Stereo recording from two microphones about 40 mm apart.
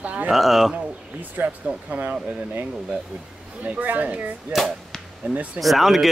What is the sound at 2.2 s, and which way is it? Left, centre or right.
Speech, right.